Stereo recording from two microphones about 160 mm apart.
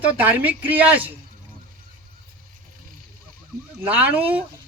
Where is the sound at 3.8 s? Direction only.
10° right (ahead or behind).